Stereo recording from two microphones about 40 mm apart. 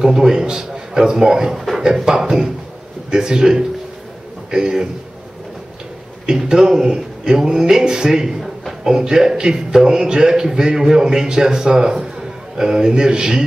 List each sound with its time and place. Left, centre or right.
0.0 s a man's voice: centre
6.2 s a man's voice: centre